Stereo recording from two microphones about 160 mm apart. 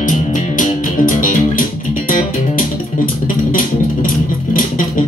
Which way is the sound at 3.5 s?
60° left (ahead or behind).